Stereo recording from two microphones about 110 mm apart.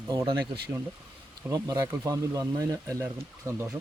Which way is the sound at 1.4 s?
35° right (ahead or behind).